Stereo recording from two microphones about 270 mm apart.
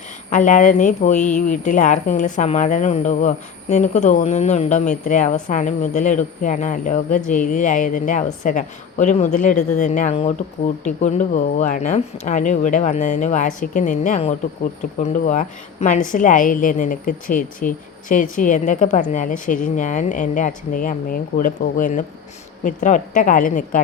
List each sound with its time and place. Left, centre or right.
0.3 s a woman's voice: left